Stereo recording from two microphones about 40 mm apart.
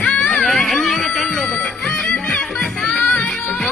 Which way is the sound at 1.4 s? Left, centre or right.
Centre.